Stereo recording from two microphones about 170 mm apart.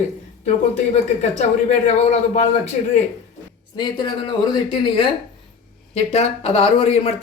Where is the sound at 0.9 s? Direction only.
45° left (ahead or behind).